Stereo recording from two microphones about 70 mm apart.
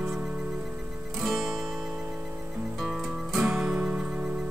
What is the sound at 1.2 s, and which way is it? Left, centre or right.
Music, centre.